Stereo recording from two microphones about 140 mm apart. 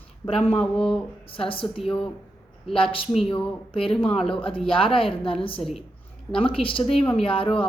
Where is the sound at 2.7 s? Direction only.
40° left (ahead or behind).